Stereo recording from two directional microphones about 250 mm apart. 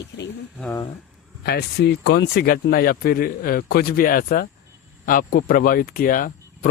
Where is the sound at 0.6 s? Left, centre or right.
Centre.